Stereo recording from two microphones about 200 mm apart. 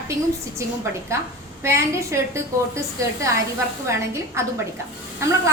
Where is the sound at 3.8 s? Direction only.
15° right (ahead or behind).